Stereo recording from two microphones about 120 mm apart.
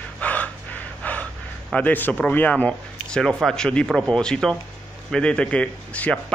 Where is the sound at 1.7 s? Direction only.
15° left (ahead or behind).